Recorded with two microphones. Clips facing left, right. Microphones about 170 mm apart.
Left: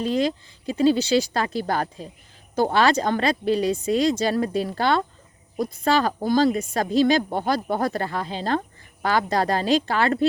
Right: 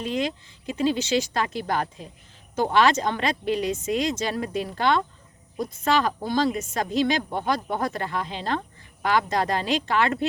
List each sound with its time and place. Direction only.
0.0 s speech: 35° left (ahead or behind)